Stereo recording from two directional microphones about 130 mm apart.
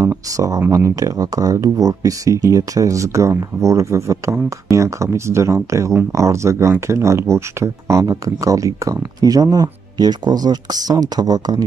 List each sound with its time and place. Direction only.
0.0 s speech: 25° right (ahead or behind)